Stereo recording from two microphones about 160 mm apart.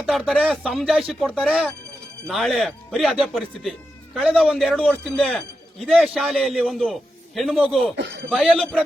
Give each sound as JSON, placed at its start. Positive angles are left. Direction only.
{"t": 0.0, "sound": "speech", "side_deg": 0}
{"t": 7.9, "sound": "speech", "side_deg": -90}
{"t": 8.3, "sound": "speech", "side_deg": 5}